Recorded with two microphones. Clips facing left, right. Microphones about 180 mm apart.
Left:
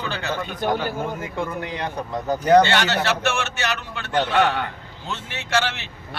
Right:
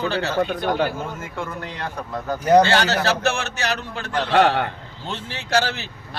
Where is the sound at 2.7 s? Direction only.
35° right (ahead or behind).